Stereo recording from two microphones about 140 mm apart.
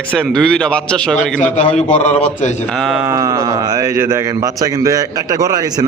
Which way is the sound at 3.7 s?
20° right (ahead or behind).